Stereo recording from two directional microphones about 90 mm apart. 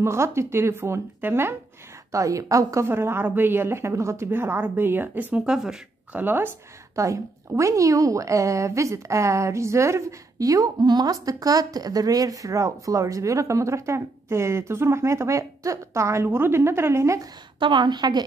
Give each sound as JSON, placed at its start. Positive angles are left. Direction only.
{"t": 0.0, "sound": "a woman's voice", "side_deg": -30}
{"t": 2.1, "sound": "a woman's voice", "side_deg": -35}
{"t": 5.4, "sound": "speech", "side_deg": -5}
{"t": 6.1, "sound": "a woman's voice", "side_deg": -25}
{"t": 7.0, "sound": "a woman's voice", "side_deg": -35}
{"t": 17.6, "sound": "a woman's voice", "side_deg": -60}